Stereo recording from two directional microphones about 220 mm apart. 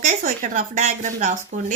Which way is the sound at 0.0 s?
35° right (ahead or behind).